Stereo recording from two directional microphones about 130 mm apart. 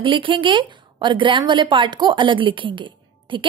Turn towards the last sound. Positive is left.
turn(degrees=-40)  # may be behind; listen again after turning